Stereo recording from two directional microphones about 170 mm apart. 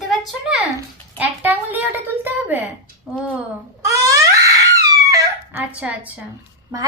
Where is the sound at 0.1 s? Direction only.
Centre (ahead or behind).